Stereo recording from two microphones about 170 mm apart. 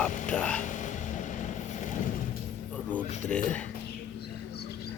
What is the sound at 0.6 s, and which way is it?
Vehicle, 45° left (ahead or behind).